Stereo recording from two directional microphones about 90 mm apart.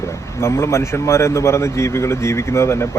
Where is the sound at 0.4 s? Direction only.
30° left (ahead or behind).